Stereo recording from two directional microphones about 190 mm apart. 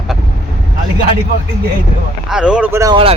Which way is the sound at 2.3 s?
5° right (ahead or behind).